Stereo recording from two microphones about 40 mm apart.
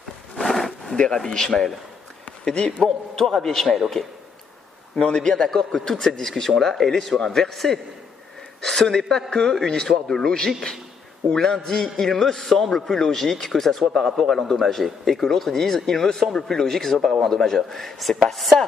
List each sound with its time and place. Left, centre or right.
0.4 s a sound: centre
0.9 s a man's voice: centre
3.2 s a man's voice: centre
4.0 s a man's voice: centre
5.3 s a man's voice: centre